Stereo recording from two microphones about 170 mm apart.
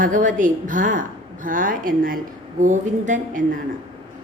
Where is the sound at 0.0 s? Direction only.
50° right (ahead or behind).